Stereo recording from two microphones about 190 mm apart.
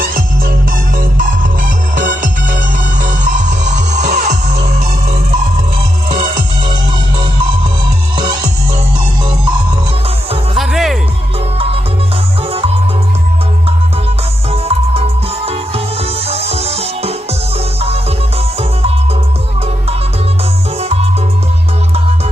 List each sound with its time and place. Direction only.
2.0 s music: 45° right (ahead or behind)
3.6 s music: 40° right (ahead or behind)
8.1 s music: 25° right (ahead or behind)
10.6 s music: centre (ahead or behind)
14.5 s music: 30° right (ahead or behind)